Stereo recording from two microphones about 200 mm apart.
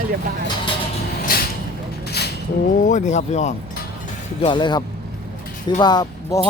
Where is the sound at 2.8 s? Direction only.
35° left (ahead or behind).